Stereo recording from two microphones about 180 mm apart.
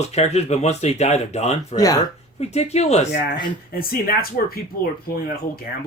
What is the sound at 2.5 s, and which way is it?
Speech, 35° left (ahead or behind).